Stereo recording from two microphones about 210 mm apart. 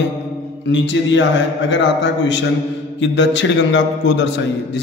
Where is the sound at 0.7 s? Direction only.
60° left (ahead or behind).